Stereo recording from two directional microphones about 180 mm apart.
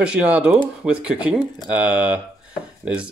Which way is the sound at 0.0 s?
5° right (ahead or behind).